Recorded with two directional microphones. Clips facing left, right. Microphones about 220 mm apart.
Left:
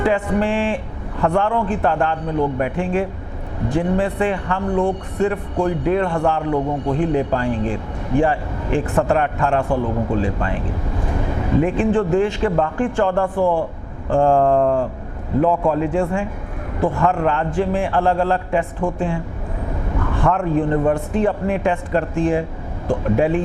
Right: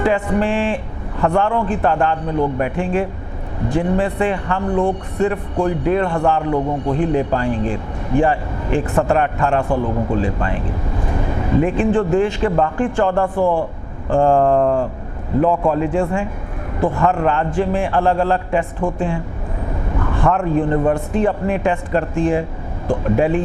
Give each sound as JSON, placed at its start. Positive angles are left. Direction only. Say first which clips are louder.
{"t": 0.0, "sound": "a man's voice", "louder": "right 1 dB", "side_deg": -15}